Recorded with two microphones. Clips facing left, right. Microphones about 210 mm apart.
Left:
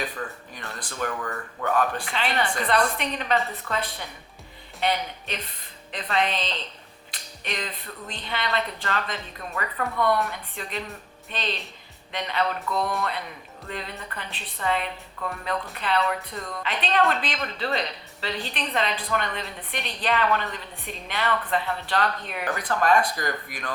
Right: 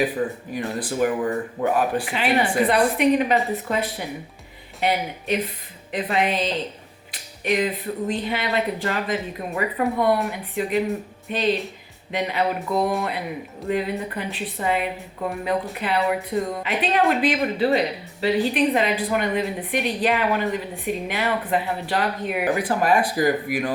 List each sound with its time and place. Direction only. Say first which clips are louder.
0.0 s speech: right 10 dB; 10° right (ahead or behind)